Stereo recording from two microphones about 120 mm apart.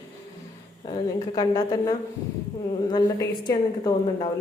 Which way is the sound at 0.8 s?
35° left (ahead or behind).